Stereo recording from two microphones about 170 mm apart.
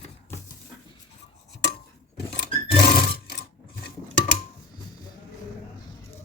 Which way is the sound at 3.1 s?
65° left (ahead or behind).